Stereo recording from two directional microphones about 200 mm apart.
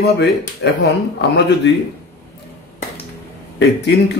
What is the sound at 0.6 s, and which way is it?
Speech, 55° left (ahead or behind).